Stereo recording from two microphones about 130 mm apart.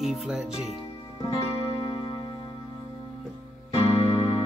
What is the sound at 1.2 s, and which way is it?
Music, 40° left (ahead or behind).